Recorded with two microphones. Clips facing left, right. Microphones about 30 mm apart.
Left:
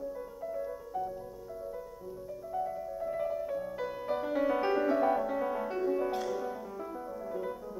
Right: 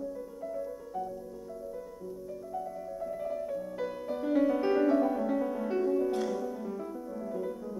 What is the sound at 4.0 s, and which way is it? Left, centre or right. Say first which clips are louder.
Music: right 3 dB; centre.